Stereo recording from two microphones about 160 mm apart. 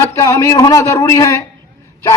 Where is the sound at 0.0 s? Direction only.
20° left (ahead or behind).